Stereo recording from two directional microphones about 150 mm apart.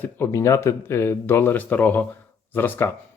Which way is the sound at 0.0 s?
20° left (ahead or behind).